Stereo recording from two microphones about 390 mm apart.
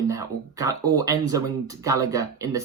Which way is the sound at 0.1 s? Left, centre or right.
Centre.